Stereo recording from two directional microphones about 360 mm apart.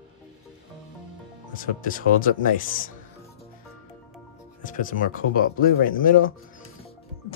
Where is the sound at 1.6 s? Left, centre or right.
Left.